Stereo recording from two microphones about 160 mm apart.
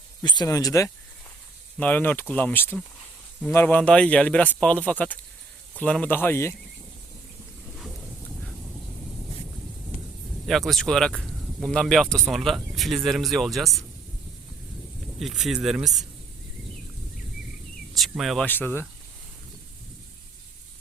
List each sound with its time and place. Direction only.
0.2 s speech: 25° left (ahead or behind)
1.8 s speech: 10° left (ahead or behind)
7.8 s dog: centre (ahead or behind)
10.4 s speech: centre (ahead or behind)
15.2 s speech: centre (ahead or behind)
18.1 s speech: centre (ahead or behind)
18.4 s speech: 10° left (ahead or behind)